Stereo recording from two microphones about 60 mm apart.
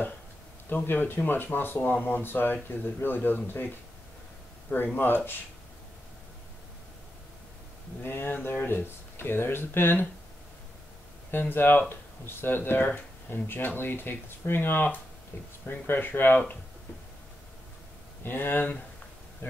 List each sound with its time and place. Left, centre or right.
0.7 s speech: left
4.9 s speech: left
8.0 s speech: left
11.3 s speech: left
18.2 s speech: left